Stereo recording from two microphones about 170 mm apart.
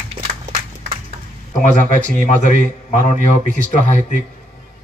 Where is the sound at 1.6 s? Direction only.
50° left (ahead or behind).